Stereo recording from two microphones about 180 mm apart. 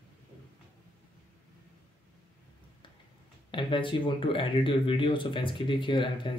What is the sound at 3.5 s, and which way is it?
Speech, 25° left (ahead or behind).